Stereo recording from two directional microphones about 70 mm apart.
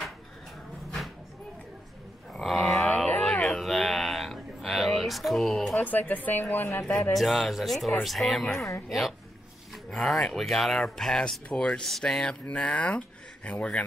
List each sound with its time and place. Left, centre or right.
2.4 s a sound: centre
5.8 s speech: left
6.8 s speech: centre